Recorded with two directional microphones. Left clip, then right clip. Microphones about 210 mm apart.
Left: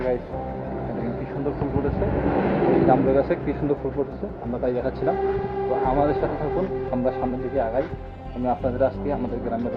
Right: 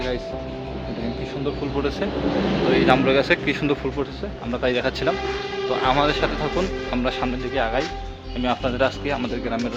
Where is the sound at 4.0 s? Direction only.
30° right (ahead or behind).